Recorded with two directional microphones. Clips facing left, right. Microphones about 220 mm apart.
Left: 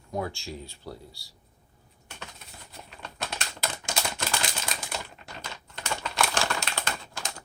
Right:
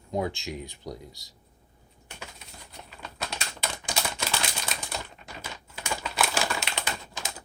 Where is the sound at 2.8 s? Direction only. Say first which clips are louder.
Even; centre (ahead or behind).